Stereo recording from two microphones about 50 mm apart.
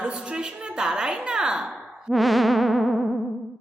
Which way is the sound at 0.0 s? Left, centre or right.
Right.